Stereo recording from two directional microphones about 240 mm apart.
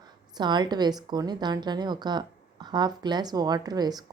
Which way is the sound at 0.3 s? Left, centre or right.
Centre.